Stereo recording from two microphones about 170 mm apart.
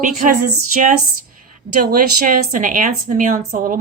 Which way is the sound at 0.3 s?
50° right (ahead or behind).